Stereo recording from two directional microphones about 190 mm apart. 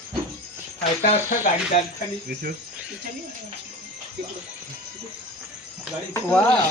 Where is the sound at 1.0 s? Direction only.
40° left (ahead or behind).